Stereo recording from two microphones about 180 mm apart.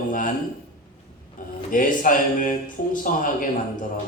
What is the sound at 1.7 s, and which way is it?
Speech, 50° left (ahead or behind).